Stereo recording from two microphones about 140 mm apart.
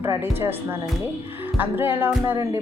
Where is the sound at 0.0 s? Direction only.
25° right (ahead or behind).